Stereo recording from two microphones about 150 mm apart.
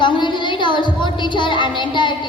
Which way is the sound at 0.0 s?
30° left (ahead or behind).